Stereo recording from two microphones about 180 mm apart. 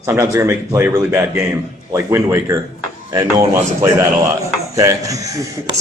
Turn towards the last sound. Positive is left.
turn(degrees=-20)  # may be behind; listen again after turning